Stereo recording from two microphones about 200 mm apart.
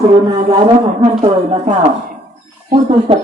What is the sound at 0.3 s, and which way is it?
Speech, 25° right (ahead or behind).